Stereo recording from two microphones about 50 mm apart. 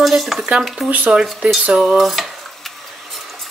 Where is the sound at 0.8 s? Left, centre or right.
Right.